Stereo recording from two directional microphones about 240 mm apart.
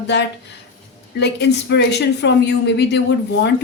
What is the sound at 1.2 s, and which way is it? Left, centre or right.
A woman's voice, left.